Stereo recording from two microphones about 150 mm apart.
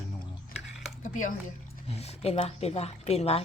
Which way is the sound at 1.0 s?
60° left (ahead or behind).